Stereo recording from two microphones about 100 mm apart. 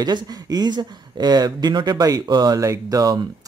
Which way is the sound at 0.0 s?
40° right (ahead or behind).